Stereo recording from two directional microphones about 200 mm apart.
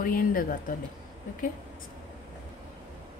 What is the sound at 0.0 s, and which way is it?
Speech, 45° left (ahead or behind).